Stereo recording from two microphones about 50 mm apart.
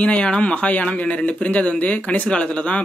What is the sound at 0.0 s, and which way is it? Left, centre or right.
Speech, left.